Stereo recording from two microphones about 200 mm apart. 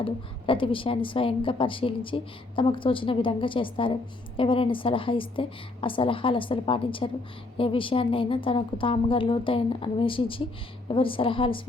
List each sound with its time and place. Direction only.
0.0 s a woman's voice: 25° left (ahead or behind)